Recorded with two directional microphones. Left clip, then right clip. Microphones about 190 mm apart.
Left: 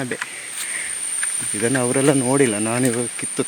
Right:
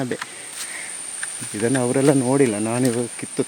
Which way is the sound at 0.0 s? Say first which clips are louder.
Left 1 dB; 20° right (ahead or behind).